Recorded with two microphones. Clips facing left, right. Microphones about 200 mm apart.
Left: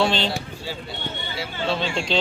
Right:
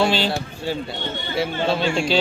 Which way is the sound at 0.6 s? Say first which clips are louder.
Right 7 dB; 55° right (ahead or behind).